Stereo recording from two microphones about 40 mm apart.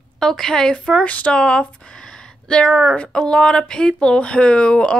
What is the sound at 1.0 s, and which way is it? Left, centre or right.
Speech, left.